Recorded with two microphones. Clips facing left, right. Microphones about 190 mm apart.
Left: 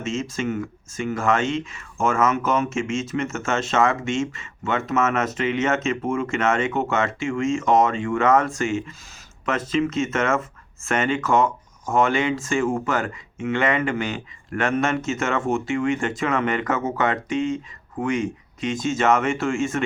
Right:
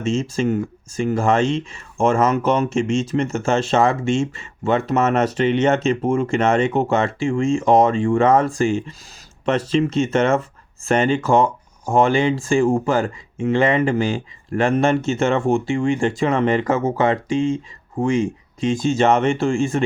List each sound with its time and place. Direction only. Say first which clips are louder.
0.0 s speech: right 6 dB; 30° right (ahead or behind)